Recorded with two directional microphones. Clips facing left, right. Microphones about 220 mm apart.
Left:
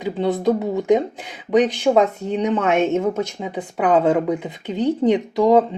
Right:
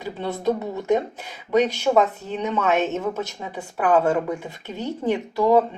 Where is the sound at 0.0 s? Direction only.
15° left (ahead or behind).